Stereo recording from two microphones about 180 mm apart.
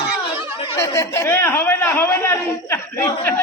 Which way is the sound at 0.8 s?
15° left (ahead or behind).